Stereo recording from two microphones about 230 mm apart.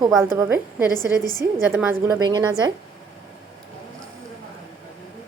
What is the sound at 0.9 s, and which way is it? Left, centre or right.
Speech, centre.